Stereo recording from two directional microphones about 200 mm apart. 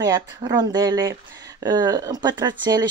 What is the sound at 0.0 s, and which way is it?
Speech, 20° right (ahead or behind).